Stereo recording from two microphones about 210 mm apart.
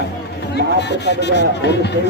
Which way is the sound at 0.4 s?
55° left (ahead or behind).